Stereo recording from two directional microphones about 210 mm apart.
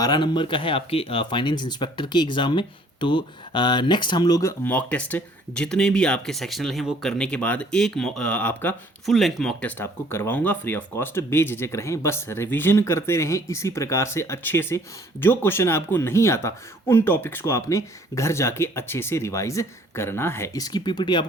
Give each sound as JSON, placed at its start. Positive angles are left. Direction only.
{"t": 0.0, "sound": "speech", "side_deg": 20}